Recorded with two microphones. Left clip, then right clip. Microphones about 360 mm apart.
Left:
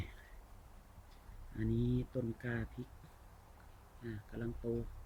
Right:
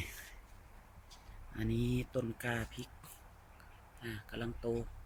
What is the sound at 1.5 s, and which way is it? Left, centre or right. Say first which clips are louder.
Speech: right 1 dB; right.